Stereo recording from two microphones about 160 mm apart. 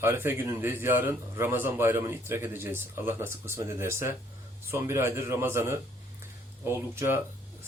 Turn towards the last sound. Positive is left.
turn(degrees=-15)  # may be behind; listen again after turning